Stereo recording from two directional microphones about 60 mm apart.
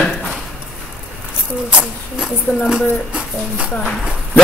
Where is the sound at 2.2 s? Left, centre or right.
Centre.